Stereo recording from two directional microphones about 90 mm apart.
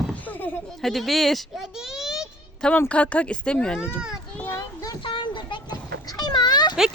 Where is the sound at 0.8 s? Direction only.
Centre (ahead or behind).